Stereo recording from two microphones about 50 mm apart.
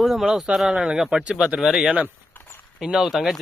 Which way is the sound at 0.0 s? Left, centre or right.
Centre.